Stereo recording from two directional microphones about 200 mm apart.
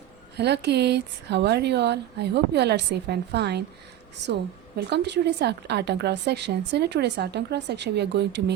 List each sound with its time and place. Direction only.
0.3 s speech: 55° right (ahead or behind)
4.9 s speech: 60° right (ahead or behind)